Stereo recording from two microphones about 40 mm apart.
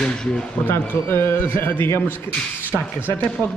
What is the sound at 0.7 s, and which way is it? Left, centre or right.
A man's voice, left.